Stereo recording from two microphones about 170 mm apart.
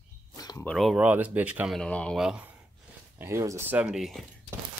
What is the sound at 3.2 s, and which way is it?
Speech, 15° right (ahead or behind).